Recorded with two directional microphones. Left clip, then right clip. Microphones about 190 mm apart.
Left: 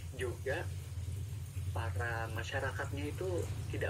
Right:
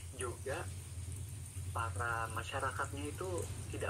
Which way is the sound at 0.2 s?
15° left (ahead or behind).